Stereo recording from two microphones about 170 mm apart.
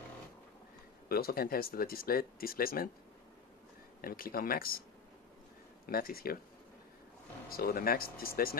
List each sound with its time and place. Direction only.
1.0 s speech: 60° left (ahead or behind)
4.0 s speech: 60° left (ahead or behind)
5.9 s speech: 60° left (ahead or behind)
7.4 s speech: 60° left (ahead or behind)